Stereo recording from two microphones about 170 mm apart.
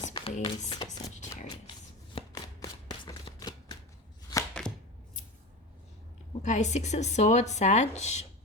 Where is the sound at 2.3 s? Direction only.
20° left (ahead or behind).